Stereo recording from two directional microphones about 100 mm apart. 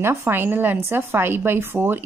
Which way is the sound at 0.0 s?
25° right (ahead or behind).